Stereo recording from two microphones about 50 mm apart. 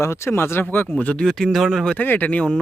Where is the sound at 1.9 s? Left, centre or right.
Left.